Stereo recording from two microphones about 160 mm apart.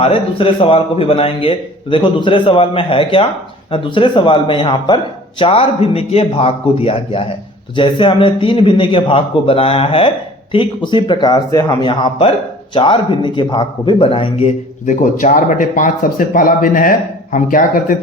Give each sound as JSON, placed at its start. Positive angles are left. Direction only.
{"t": 0.0, "sound": "a man's voice", "side_deg": 35}
{"t": 14.8, "sound": "speech", "side_deg": 55}